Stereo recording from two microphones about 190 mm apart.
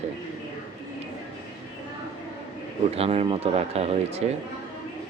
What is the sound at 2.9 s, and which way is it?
A man's voice, 30° right (ahead or behind).